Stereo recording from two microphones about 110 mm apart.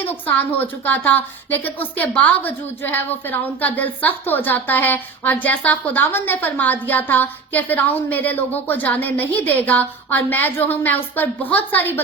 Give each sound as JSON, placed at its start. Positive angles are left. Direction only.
{"t": 0.0, "sound": "a woman's voice", "side_deg": 15}